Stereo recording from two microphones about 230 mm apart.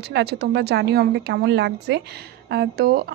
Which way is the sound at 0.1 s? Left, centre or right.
Right.